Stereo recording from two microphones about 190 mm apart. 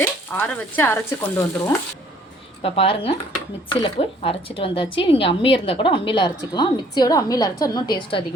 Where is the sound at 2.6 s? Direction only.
30° left (ahead or behind).